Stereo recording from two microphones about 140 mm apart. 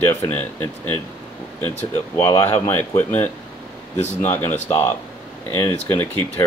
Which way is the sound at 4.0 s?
55° left (ahead or behind).